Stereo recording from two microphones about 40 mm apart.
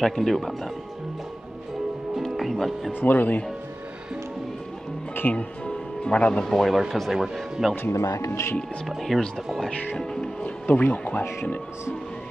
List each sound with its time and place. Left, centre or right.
0.0 s speech: centre
2.9 s speech: left
5.2 s speech: left
5.7 s music: left
6.4 s speech: centre
6.7 s speech: centre
7.7 s speech: left
8.8 s speech: centre
10.4 s speech: left